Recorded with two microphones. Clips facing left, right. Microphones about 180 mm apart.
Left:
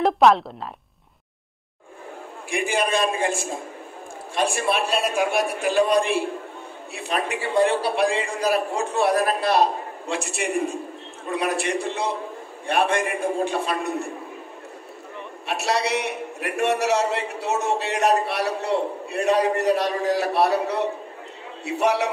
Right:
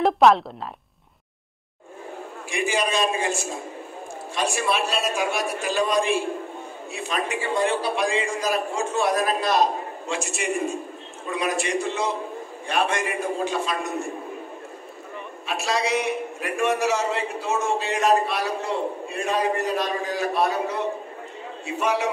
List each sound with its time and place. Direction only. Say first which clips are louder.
0.0 s speech: even; centre (ahead or behind)
2.5 s a man's voice: left 1 dB; 55° left (ahead or behind)
15.4 s a man's voice: left 1 dB; 65° left (ahead or behind)